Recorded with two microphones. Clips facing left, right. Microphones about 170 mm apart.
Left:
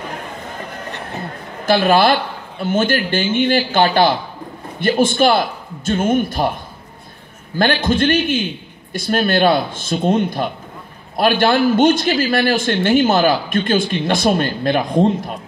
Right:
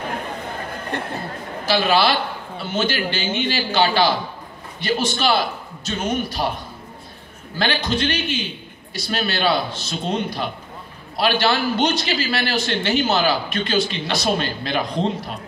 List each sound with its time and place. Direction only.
1.7 s a man's voice: 50° left (ahead or behind)